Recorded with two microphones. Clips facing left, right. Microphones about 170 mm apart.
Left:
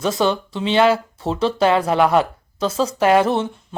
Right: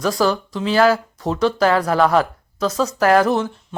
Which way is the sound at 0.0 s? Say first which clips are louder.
Even; 25° left (ahead or behind).